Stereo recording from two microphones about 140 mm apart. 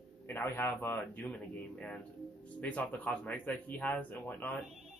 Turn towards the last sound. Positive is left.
turn(degrees=10)  # may be behind; listen again after turning